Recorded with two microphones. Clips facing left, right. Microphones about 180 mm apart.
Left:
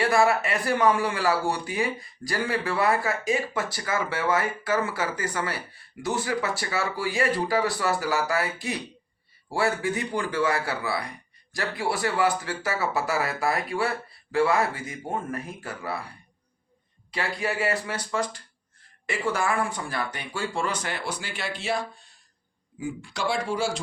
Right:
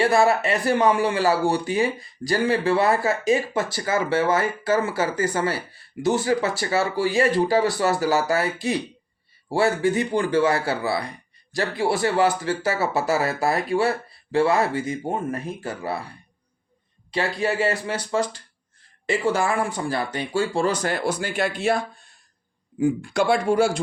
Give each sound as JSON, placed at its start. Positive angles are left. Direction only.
{"t": 0.0, "sound": "speech", "side_deg": -25}
{"t": 9.5, "sound": "speech", "side_deg": -25}
{"t": 17.1, "sound": "speech", "side_deg": -25}